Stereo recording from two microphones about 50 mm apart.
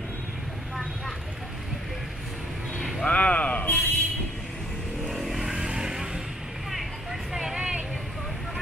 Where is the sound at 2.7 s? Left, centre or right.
Centre.